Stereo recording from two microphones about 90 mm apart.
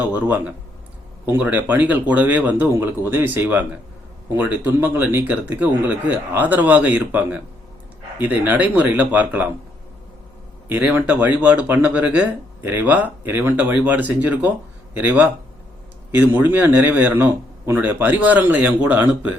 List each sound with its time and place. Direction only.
0.0 s speech: 20° right (ahead or behind)
10.7 s speech: 20° right (ahead or behind)